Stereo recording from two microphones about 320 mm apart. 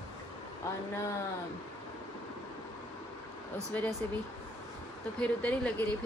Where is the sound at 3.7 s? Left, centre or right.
Centre.